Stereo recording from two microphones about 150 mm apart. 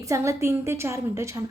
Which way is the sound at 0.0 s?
20° right (ahead or behind).